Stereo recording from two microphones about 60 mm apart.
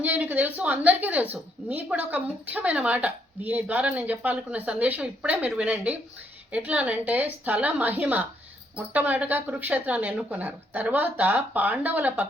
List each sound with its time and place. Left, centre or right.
0.0 s speech: right